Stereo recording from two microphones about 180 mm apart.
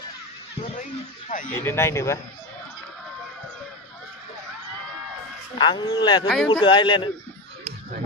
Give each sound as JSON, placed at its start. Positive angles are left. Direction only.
{"t": 1.3, "sound": "speech", "side_deg": 45}
{"t": 1.6, "sound": "speech", "side_deg": 15}
{"t": 5.5, "sound": "speech", "side_deg": 25}
{"t": 6.2, "sound": "a man's voice", "side_deg": 0}
{"t": 6.5, "sound": "speech", "side_deg": 25}